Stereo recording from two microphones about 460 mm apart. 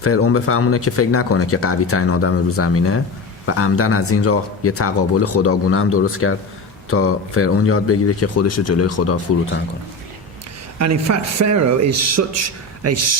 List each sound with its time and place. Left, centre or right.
0.0 s speech: left
10.8 s a man's voice: right